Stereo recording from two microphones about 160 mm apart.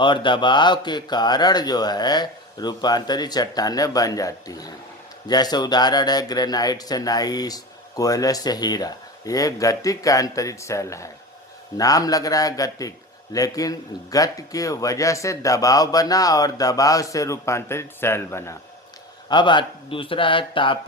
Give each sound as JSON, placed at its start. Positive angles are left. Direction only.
{"t": 0.0, "sound": "speech", "side_deg": 30}
{"t": 19.3, "sound": "speech", "side_deg": 30}